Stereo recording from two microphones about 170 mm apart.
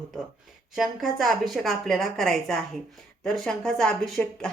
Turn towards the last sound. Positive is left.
turn(degrees=0)  # may be behind; listen again after turning